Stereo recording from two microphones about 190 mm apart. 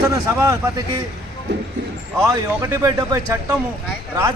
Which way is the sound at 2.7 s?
15° right (ahead or behind).